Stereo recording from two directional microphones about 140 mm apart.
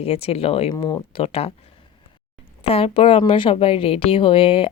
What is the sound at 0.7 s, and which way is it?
Speech, 30° left (ahead or behind).